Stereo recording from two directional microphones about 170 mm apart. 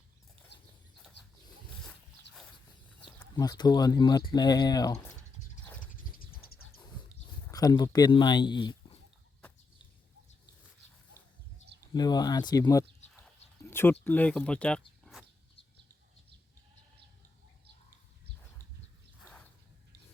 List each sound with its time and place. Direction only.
3.3 s speech: 25° left (ahead or behind)
6.1 s a sound: 60° left (ahead or behind)
7.4 s speech: 20° left (ahead or behind)
11.9 s speech: 25° left (ahead or behind)
13.1 s a sound: 15° left (ahead or behind)
14.0 s speech: 10° left (ahead or behind)
15.1 s bird: 5° left (ahead or behind)